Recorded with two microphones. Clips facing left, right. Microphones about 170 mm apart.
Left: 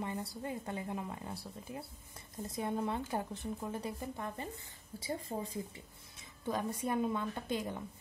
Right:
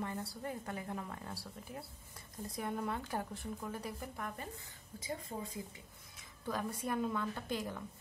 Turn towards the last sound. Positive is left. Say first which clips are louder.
# left 2 dB
turn(degrees=20)  # may be behind; listen again after turning